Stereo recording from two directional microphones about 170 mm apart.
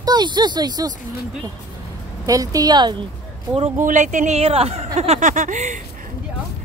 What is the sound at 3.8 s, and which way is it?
Speech, 50° right (ahead or behind).